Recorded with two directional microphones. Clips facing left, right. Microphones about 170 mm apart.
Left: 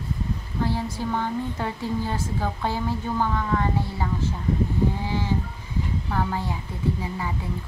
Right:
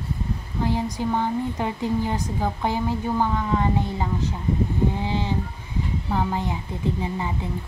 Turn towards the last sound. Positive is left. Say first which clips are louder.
# right 1 dB
turn(degrees=-25)  # may be behind; listen again after turning